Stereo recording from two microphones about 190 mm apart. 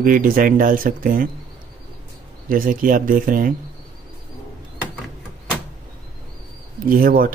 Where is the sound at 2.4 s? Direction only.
45° right (ahead or behind).